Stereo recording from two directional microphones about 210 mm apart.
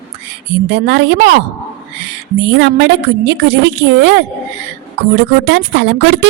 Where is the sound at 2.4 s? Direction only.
55° right (ahead or behind).